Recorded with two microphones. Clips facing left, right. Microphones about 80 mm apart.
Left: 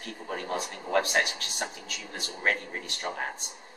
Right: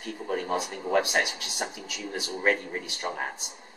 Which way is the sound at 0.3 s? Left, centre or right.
Centre.